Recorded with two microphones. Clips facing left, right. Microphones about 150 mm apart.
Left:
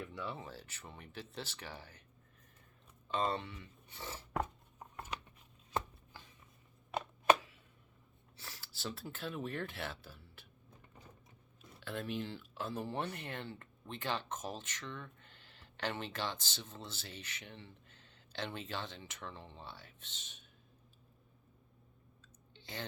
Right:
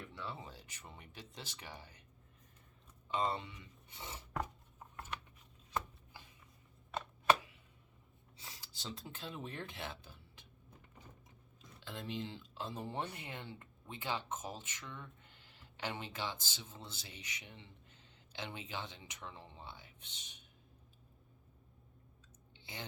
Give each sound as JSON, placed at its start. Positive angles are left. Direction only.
{"t": 0.1, "sound": "speech", "side_deg": -20}
{"t": 3.1, "sound": "speech", "side_deg": -15}
{"t": 8.4, "sound": "speech", "side_deg": -20}
{"t": 11.8, "sound": "speech", "side_deg": -15}
{"t": 22.5, "sound": "a sound", "side_deg": -15}